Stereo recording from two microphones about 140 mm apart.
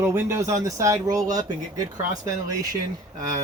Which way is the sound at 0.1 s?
20° right (ahead or behind).